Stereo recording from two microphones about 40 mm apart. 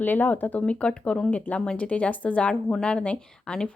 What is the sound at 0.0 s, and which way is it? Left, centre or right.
Speech, left.